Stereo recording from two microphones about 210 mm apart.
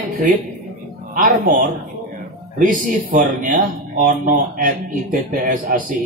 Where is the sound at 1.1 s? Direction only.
45° right (ahead or behind).